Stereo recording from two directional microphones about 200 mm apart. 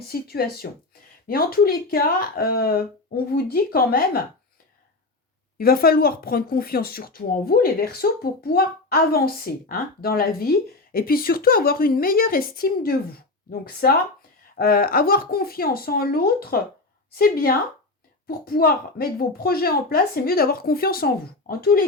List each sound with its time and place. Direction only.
0.1 s speech: 50° left (ahead or behind)
5.5 s speech: 50° left (ahead or behind)